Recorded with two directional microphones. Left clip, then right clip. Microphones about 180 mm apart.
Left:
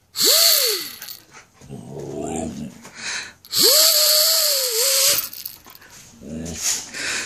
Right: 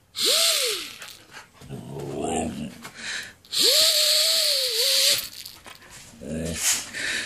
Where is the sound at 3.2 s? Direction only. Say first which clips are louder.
Left 4 dB; 45° left (ahead or behind).